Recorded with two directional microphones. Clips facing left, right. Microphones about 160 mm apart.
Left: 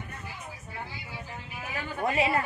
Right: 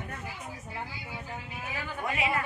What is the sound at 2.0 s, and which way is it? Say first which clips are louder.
Speech: left 5 dB; 30° left (ahead or behind).